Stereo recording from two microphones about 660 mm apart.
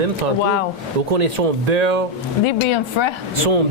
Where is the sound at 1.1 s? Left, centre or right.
Right.